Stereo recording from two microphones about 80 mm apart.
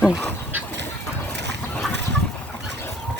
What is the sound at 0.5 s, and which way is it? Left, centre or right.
Duck, right.